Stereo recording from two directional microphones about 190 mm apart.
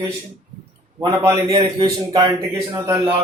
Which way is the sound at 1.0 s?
15° right (ahead or behind).